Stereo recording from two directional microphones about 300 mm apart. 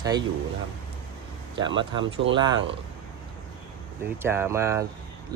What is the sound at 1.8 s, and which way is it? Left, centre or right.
Speech, centre.